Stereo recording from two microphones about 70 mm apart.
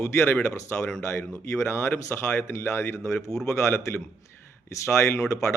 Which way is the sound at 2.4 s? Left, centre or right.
Left.